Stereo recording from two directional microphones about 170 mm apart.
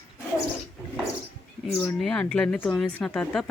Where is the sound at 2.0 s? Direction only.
5° left (ahead or behind).